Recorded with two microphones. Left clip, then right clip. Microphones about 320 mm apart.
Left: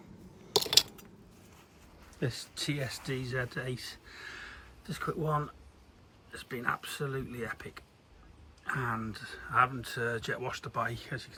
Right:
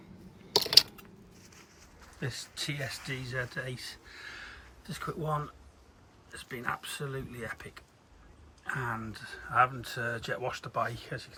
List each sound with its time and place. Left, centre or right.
0.5 s typing: centre
2.1 s speech: centre